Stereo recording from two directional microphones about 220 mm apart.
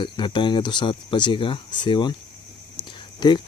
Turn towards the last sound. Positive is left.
turn(degrees=20)  # may be behind; listen again after turning